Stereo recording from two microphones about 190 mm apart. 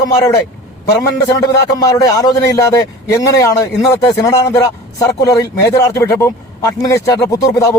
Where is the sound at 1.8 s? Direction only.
20° left (ahead or behind).